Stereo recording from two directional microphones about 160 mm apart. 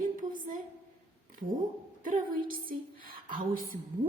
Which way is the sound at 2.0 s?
55° right (ahead or behind).